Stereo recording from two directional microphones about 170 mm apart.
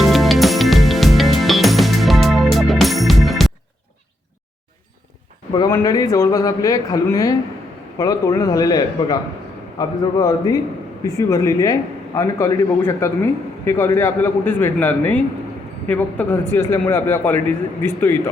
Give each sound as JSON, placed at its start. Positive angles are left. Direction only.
{"t": 0.0, "sound": "music", "side_deg": 0}
{"t": 5.5, "sound": "a man's voice", "side_deg": 20}